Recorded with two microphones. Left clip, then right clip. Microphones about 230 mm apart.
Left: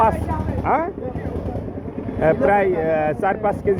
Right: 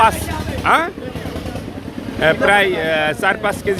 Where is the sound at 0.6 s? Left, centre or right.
Centre.